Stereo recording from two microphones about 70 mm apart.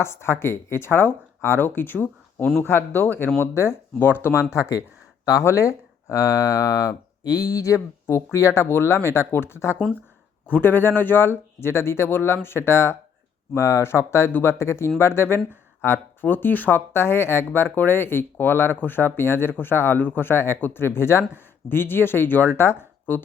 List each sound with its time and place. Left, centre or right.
0.0 s speech: left
4.5 s speech: left
8.0 s speech: left
10.5 s speech: left